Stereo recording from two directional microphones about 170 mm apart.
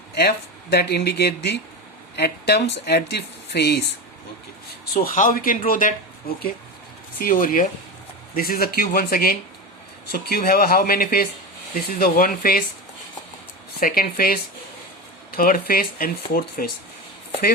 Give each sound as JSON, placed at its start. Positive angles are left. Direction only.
{"t": 0.2, "sound": "speech", "side_deg": 70}
{"t": 4.9, "sound": "speech", "side_deg": 50}
{"t": 13.7, "sound": "speech", "side_deg": 55}
{"t": 15.4, "sound": "speech", "side_deg": 55}